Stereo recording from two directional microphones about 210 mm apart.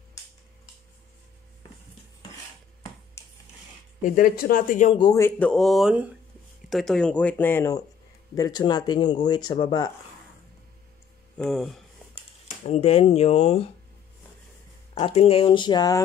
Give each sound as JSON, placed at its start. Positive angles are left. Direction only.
{"t": 4.0, "sound": "speech", "side_deg": 40}
{"t": 4.9, "sound": "speech", "side_deg": 15}
{"t": 11.3, "sound": "speech", "side_deg": 0}
{"t": 12.6, "sound": "speech", "side_deg": 30}
{"t": 15.0, "sound": "speech", "side_deg": 30}